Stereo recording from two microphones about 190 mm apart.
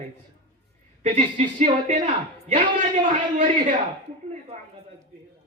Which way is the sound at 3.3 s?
40° right (ahead or behind).